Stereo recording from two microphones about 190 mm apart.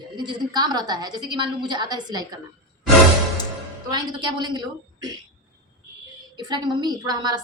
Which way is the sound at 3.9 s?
20° right (ahead or behind).